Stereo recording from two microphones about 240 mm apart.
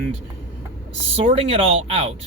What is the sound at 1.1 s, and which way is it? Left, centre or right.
Speech, right.